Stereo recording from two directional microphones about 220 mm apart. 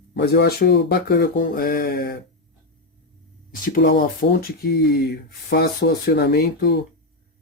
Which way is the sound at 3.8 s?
40° left (ahead or behind).